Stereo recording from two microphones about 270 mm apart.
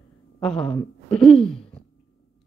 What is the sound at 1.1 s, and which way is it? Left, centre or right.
Speech, centre.